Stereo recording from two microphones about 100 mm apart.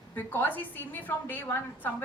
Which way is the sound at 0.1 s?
20° left (ahead or behind).